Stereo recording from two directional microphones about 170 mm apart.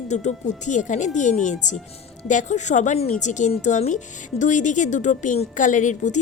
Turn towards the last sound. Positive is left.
turn(degrees=45)  # may be behind; listen again after turning